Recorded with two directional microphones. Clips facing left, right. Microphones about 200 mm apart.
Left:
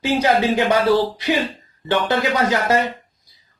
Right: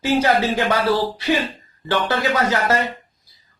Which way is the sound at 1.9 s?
20° left (ahead or behind).